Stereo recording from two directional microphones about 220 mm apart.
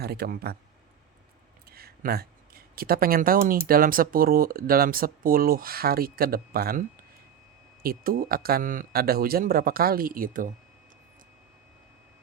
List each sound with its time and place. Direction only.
0.0 s speech: 45° right (ahead or behind)
1.7 s speech: 45° right (ahead or behind)